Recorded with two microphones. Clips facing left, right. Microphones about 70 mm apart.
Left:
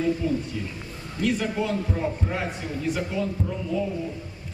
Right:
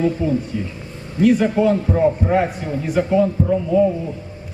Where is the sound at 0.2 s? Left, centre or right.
Centre.